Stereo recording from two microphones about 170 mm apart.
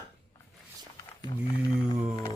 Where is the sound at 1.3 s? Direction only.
30° left (ahead or behind).